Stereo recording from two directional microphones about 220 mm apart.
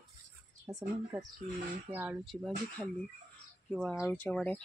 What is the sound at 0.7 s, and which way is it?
Speech, 15° right (ahead or behind).